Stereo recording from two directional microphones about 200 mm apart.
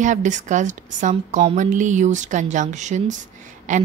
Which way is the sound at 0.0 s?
40° right (ahead or behind).